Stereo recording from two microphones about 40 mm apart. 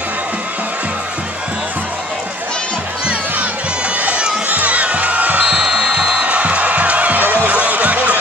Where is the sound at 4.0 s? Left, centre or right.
Right.